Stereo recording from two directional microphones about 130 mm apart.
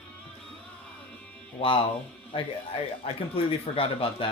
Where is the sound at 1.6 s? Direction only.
45° left (ahead or behind).